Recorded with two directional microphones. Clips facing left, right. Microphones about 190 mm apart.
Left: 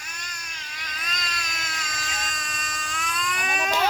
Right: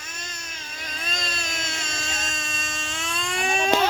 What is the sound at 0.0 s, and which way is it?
Baby cry, 25° right (ahead or behind).